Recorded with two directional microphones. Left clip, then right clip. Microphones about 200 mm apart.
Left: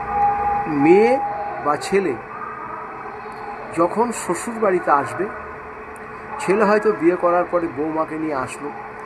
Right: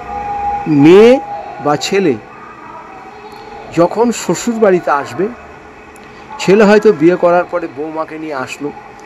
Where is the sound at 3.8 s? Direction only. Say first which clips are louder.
Right 7 dB; 40° right (ahead or behind).